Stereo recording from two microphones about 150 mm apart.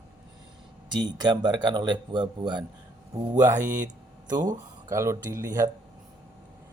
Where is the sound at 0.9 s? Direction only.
30° right (ahead or behind).